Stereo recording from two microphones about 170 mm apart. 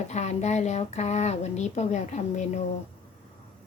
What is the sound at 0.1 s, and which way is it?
Speech, 45° left (ahead or behind).